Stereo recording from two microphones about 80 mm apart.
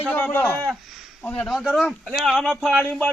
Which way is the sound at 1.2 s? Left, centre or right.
Centre.